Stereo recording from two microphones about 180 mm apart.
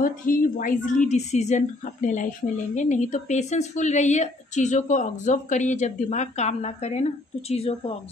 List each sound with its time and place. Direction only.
0.0 s a woman's voice: 50° left (ahead or behind); by 8.0 s 35° left (ahead or behind)